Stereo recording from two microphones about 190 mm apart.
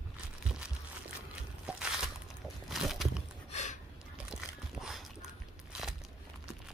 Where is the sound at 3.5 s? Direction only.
40° left (ahead or behind).